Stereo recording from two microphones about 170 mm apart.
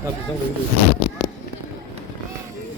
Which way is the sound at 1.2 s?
5° left (ahead or behind).